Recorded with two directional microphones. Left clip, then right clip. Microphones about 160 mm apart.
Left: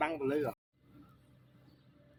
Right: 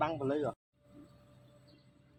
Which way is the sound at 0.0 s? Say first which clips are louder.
Even; 20° left (ahead or behind).